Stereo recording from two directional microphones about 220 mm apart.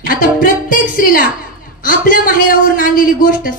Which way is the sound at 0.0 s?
40° left (ahead or behind).